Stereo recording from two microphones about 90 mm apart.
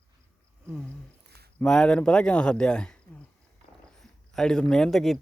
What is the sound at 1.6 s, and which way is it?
Speech, 10° left (ahead or behind).